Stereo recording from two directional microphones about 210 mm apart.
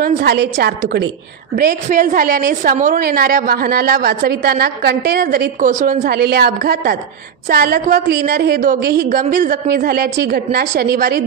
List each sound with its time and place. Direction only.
0.0 s a woman's voice: 50° right (ahead or behind)
1.6 s a woman's voice: 40° right (ahead or behind)